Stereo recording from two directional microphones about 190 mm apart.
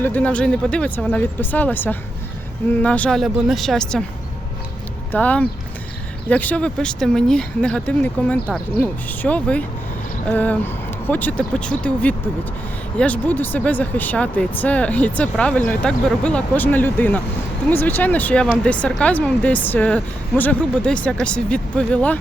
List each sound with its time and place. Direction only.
0.0 s speech: 10° left (ahead or behind)
5.1 s speech: 5° left (ahead or behind)